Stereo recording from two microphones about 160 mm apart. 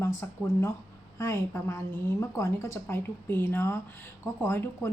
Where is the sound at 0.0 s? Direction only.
15° left (ahead or behind).